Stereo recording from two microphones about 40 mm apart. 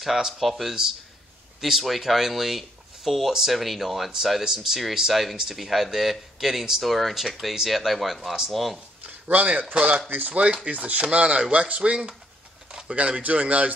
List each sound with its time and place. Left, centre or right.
0.0 s speech: centre
0.4 s speech: centre
9.3 s a man's voice: right
10.0 s a man's voice: right